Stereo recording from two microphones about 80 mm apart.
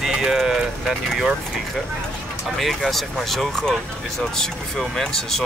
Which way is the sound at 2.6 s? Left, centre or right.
Centre.